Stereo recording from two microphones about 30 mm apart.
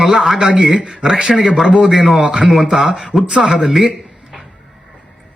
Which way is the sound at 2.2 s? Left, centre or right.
Right.